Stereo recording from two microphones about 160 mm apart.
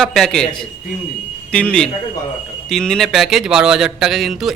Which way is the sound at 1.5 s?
5° left (ahead or behind).